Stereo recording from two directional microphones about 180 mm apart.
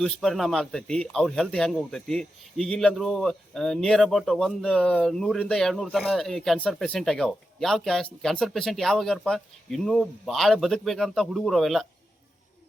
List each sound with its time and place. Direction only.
0.0 s speech: centre (ahead or behind)